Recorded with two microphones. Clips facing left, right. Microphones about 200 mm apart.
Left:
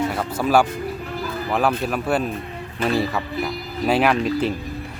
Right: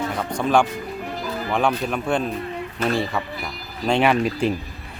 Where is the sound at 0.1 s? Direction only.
5° left (ahead or behind).